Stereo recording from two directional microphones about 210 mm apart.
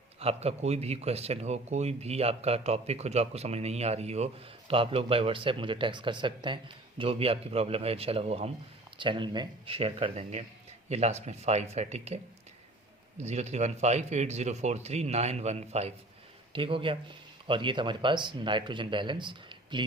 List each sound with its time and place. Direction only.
0.2 s a man's voice: 30° right (ahead or behind)
13.2 s a man's voice: 30° right (ahead or behind)